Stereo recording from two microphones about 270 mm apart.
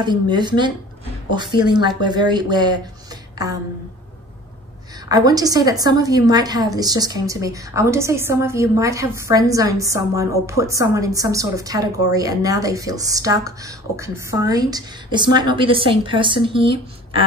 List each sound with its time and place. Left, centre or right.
0.0 s a woman's voice: centre
5.0 s a woman's voice: centre